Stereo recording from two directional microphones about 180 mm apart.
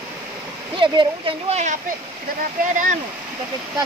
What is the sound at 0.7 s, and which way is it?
Speech, 25° right (ahead or behind).